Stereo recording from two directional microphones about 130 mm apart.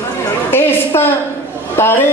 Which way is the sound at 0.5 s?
15° left (ahead or behind).